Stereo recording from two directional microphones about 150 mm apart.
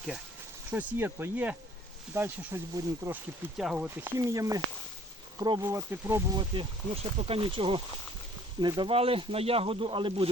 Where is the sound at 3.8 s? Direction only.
15° right (ahead or behind).